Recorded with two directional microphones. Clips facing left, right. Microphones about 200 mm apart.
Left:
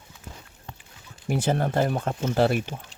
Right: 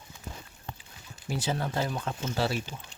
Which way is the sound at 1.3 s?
55° left (ahead or behind).